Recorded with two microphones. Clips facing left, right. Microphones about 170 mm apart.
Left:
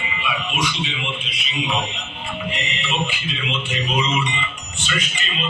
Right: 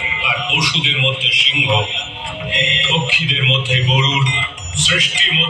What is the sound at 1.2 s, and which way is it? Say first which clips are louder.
A man's voice: right 3 dB; 90° right.